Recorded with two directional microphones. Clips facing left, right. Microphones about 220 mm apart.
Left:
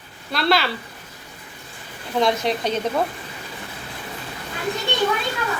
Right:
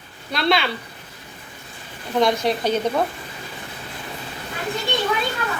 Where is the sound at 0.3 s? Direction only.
Centre (ahead or behind).